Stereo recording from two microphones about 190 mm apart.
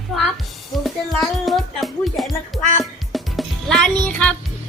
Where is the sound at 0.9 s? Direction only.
Centre (ahead or behind).